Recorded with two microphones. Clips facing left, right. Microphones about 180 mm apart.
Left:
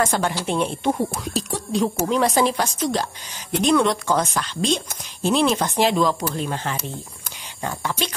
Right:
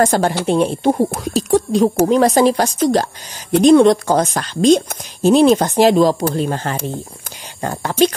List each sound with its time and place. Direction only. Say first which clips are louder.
0.0 s speech: right 7 dB; 40° right (ahead or behind)